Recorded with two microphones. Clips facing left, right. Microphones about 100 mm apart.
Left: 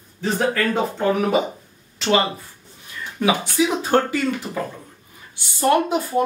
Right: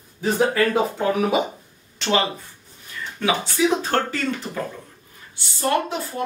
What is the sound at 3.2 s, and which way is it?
Speech, 15° left (ahead or behind).